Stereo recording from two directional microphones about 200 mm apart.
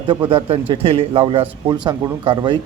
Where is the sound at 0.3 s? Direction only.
25° right (ahead or behind).